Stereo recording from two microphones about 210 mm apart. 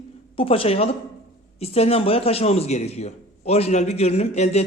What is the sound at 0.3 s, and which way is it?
A man's voice, 25° left (ahead or behind).